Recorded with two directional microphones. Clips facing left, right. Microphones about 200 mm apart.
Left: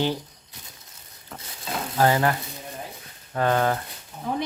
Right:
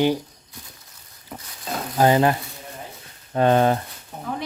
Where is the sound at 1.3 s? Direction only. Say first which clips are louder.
Right 3 dB; 10° right (ahead or behind).